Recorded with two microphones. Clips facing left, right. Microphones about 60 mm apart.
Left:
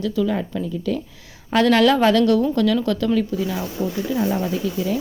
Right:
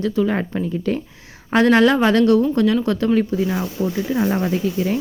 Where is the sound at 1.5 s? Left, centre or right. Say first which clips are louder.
Right 1 dB; right.